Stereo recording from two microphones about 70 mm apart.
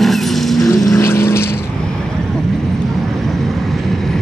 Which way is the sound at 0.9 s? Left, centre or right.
Left.